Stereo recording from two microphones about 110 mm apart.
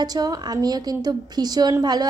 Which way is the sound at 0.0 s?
35° right (ahead or behind).